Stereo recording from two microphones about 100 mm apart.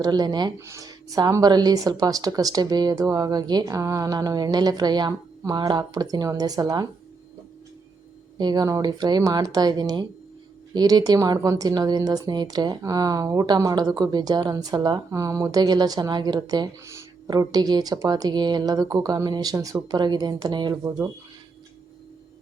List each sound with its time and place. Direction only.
0.0 s speech: 45° right (ahead or behind)
0.6 s speech: 30° right (ahead or behind)
8.4 s speech: 45° right (ahead or behind)
16.8 s a sound: 30° right (ahead or behind)
17.2 s speech: 40° right (ahead or behind)